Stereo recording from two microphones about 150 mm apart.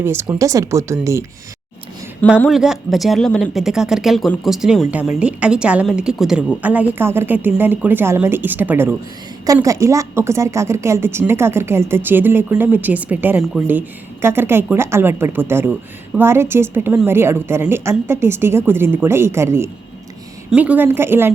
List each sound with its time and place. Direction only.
0.0 s a woman's voice: 15° right (ahead or behind)
2.5 s a woman's voice: 5° right (ahead or behind)